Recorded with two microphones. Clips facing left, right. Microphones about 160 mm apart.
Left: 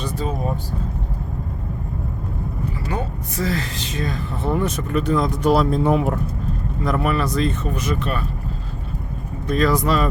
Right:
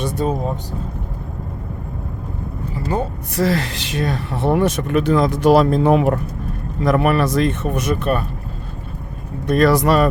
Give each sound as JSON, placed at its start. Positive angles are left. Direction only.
{"t": 0.2, "sound": "speech", "side_deg": -50}
{"t": 3.3, "sound": "speech", "side_deg": -70}
{"t": 6.8, "sound": "speech", "side_deg": -65}
{"t": 9.5, "sound": "speech", "side_deg": -70}